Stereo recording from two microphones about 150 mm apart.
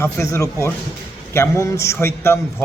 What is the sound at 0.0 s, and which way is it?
A man's voice, 20° left (ahead or behind).